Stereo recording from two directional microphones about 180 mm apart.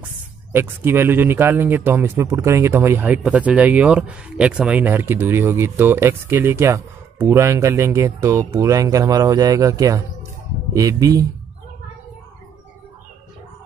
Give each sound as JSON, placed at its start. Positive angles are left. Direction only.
{"t": 0.0, "sound": "speech", "side_deg": -10}